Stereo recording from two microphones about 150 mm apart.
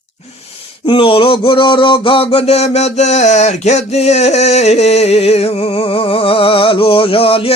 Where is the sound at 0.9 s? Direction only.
35° left (ahead or behind).